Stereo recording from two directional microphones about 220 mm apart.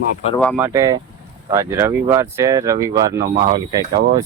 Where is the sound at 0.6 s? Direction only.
15° right (ahead or behind).